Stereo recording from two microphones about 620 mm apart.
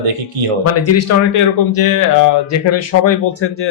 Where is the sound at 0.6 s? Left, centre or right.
Left.